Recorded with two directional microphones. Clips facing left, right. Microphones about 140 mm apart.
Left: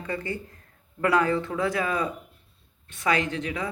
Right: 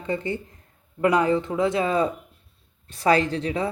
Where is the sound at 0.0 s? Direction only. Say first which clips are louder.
Right 4 dB; 20° right (ahead or behind).